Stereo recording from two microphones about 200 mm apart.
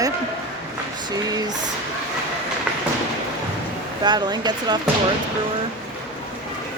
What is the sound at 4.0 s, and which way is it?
Speech, 20° right (ahead or behind).